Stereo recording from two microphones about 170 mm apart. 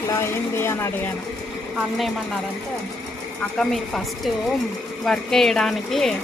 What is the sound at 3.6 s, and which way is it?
Speech, centre (ahead or behind).